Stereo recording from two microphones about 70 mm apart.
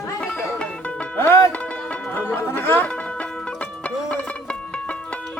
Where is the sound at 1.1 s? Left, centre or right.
Left.